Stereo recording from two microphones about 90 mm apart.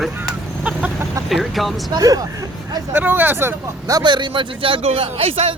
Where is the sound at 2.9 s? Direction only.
20° right (ahead or behind).